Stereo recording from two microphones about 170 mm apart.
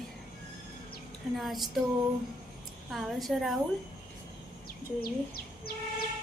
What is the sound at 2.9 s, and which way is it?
Speech, centre (ahead or behind).